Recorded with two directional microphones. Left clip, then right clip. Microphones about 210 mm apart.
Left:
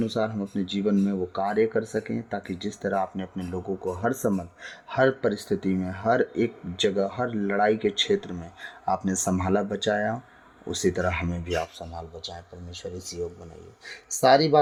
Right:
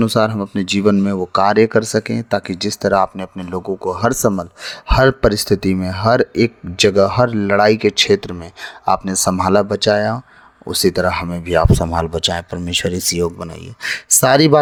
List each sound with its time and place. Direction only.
0.0 s speech: 35° right (ahead or behind)